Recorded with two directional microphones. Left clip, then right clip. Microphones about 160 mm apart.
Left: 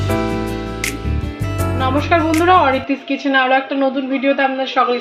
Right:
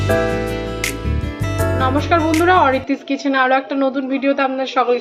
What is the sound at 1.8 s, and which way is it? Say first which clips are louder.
Speech: left 1 dB; 20° right (ahead or behind).